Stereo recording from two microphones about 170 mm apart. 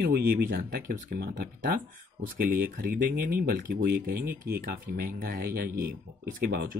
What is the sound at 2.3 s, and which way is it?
Speech, 60° right (ahead or behind).